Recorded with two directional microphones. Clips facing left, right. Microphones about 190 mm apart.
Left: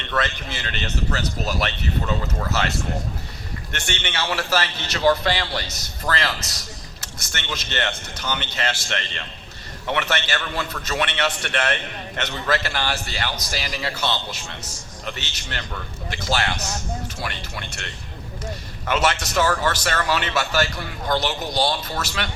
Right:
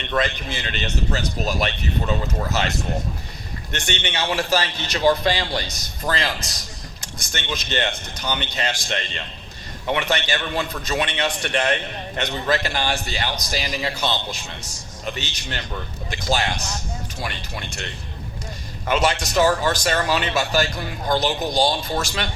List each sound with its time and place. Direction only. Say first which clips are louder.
0.1 s a man's voice: right 2 dB; 15° right (ahead or behind)
18.9 s a man's voice: right 1 dB; 15° right (ahead or behind)